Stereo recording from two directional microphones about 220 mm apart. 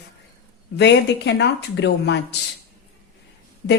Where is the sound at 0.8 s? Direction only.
50° left (ahead or behind).